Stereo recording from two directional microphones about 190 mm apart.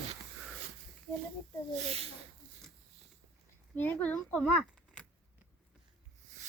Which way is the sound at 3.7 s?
10° left (ahead or behind).